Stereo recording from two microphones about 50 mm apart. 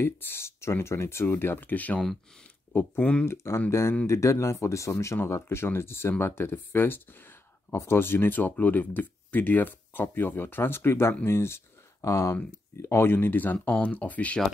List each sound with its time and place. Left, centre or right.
0.0 s speech: left
2.7 s speech: left
3.3 s speech: left
4.1 s speech: left
7.7 s speech: left
12.4 s speech: left